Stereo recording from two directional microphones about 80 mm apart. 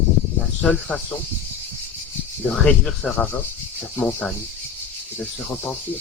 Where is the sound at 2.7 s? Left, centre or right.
Centre.